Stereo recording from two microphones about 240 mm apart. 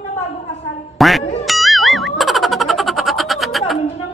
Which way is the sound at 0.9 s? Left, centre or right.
Centre.